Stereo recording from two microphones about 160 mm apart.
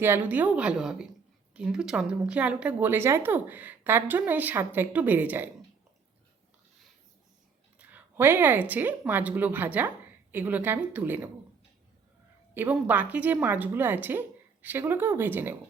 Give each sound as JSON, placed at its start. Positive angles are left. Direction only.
{"t": 0.0, "sound": "a woman's voice", "side_deg": -10}
{"t": 7.8, "sound": "a woman's voice", "side_deg": -10}
{"t": 12.5, "sound": "a woman's voice", "side_deg": -10}